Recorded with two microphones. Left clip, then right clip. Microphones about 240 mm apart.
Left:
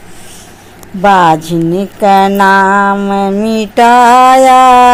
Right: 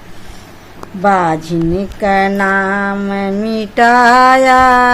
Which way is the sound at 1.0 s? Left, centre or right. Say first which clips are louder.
Left 6 dB; centre.